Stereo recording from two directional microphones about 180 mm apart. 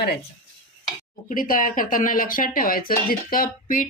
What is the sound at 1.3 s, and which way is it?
Speech, 50° left (ahead or behind).